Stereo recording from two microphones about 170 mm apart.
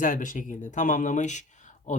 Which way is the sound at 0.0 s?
50° left (ahead or behind).